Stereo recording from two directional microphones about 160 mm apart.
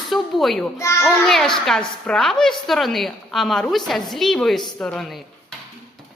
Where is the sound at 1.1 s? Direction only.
Centre (ahead or behind).